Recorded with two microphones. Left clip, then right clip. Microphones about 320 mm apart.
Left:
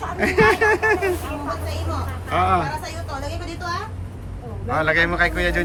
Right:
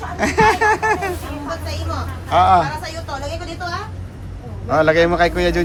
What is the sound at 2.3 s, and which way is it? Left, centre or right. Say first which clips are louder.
Speech: right 7 dB; centre.